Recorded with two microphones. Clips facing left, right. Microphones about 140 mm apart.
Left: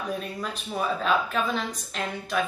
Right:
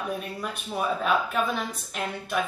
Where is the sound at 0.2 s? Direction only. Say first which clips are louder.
Even; 10° right (ahead or behind).